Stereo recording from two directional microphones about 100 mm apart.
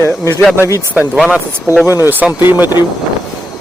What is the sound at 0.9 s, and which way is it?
Speech, 10° right (ahead or behind).